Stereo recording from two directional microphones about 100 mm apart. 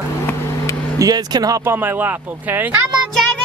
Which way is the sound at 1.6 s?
20° right (ahead or behind).